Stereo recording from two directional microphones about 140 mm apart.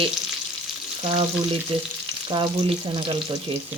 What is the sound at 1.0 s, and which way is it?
Frying, 45° right (ahead or behind).